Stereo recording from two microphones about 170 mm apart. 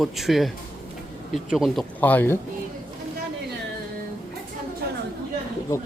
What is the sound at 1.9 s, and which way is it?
Speech, 10° left (ahead or behind).